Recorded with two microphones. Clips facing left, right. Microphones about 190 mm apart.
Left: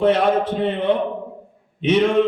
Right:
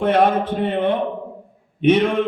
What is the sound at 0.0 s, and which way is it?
Speech, 55° right (ahead or behind).